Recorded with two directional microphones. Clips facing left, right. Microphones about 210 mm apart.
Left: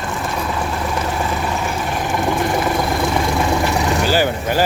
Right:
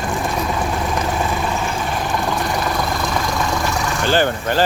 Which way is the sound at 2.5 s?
30° left (ahead or behind).